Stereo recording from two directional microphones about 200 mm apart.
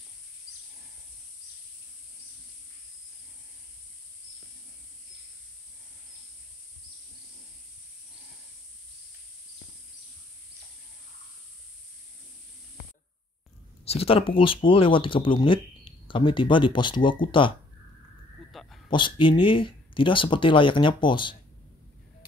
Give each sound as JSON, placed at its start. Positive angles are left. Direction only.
{"t": 13.8, "sound": "speech", "side_deg": 30}
{"t": 18.5, "sound": "a sound", "side_deg": 0}
{"t": 18.9, "sound": "speech", "side_deg": 25}